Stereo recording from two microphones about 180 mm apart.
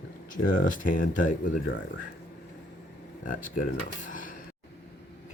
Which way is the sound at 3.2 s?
45° left (ahead or behind).